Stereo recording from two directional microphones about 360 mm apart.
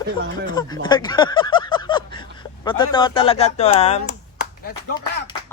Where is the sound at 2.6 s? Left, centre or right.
Centre.